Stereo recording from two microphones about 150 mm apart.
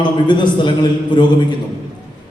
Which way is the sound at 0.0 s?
30° left (ahead or behind).